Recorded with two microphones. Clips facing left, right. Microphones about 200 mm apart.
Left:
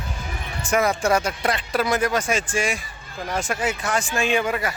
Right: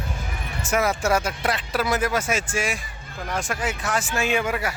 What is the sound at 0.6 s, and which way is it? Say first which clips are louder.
Speech: left 2 dB; 5° right (ahead or behind).